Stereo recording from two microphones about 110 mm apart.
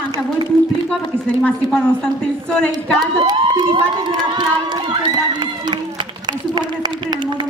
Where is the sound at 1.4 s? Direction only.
5° left (ahead or behind).